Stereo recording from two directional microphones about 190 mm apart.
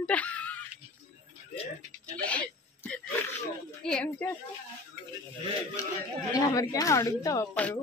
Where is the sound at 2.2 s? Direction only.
5° left (ahead or behind).